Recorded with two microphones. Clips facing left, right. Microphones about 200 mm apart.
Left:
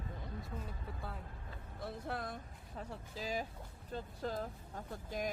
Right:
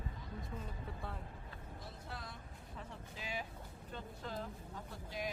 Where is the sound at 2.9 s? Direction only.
35° left (ahead or behind).